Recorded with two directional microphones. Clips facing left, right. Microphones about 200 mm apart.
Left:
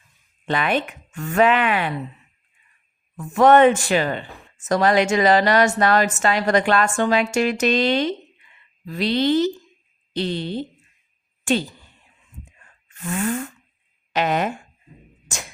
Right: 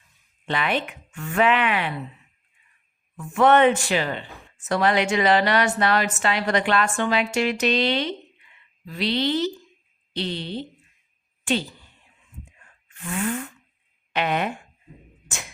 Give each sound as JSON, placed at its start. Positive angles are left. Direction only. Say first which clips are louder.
{"t": 0.4, "sound": "a woman's voice", "louder": "left 3 dB", "side_deg": 45}
{"t": 3.2, "sound": "a woman's voice", "louder": "left 4 dB", "side_deg": 40}
{"t": 12.9, "sound": "a sound", "louder": "left 3 dB", "side_deg": 45}
{"t": 14.1, "sound": "speech", "louder": "left 3 dB", "side_deg": 40}